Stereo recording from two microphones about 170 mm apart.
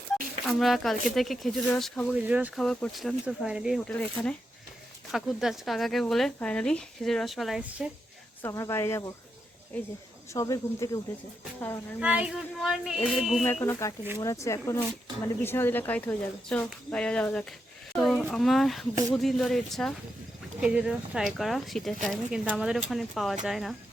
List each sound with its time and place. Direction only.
0.4 s speech: centre (ahead or behind)
2.1 s speech: 10° right (ahead or behind)
2.6 s speech: 5° left (ahead or behind)
3.8 s speech: 10° left (ahead or behind)
8.4 s speech: 15° left (ahead or behind)
10.3 s speech: 20° left (ahead or behind)
11.9 s speech: 5° right (ahead or behind)
13.4 s speech: 10° left (ahead or behind)